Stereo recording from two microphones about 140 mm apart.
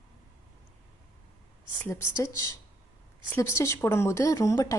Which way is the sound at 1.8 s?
20° left (ahead or behind).